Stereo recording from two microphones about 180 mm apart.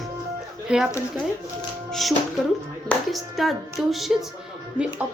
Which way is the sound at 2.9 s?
Centre (ahead or behind).